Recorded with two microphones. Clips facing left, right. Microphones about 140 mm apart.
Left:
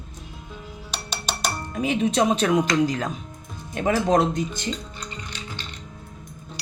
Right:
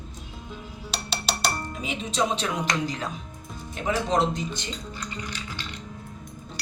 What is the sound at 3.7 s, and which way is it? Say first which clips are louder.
Speech: left 5 dB; 55° left (ahead or behind).